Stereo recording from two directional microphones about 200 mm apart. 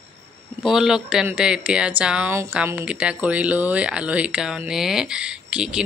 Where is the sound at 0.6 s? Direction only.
Centre (ahead or behind).